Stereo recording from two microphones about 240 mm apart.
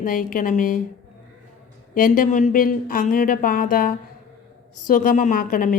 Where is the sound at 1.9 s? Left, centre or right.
Left.